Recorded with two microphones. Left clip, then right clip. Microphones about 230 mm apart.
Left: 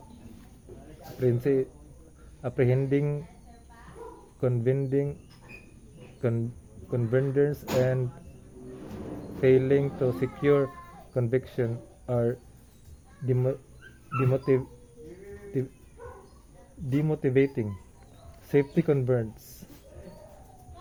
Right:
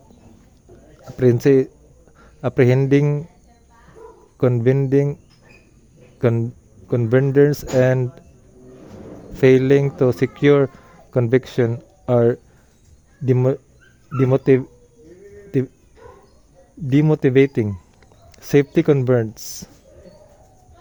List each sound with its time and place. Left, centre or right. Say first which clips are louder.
1.2 s speech: right 11 dB; right
4.4 s speech: right 10 dB; right
6.1 s speech: right 11 dB; right
9.4 s speech: right 8 dB; right
16.9 s speech: right 10 dB; right